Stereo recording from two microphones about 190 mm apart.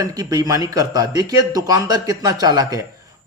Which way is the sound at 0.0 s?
20° right (ahead or behind).